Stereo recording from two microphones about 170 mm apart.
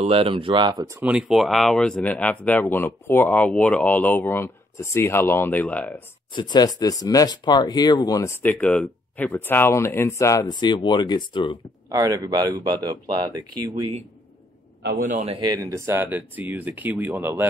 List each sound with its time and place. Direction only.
0.0 s speech: 35° right (ahead or behind); by 6.0 s 10° left (ahead or behind)
6.3 s speech: 25° left (ahead or behind)
11.9 s speech: 20° right (ahead or behind)
15.0 s a man's voice: 50° right (ahead or behind)
15.2 s speech: 25° right (ahead or behind)